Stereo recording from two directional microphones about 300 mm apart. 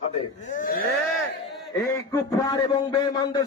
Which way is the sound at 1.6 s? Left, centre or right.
Centre.